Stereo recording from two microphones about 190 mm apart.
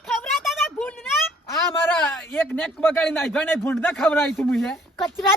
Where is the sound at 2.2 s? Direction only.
10° left (ahead or behind).